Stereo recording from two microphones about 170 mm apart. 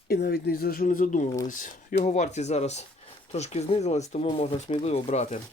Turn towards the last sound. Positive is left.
turn(degrees=40)  # may be behind; listen again after turning